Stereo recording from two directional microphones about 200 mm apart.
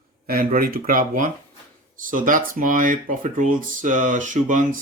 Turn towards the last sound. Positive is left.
turn(degrees=-40)  # may be behind; listen again after turning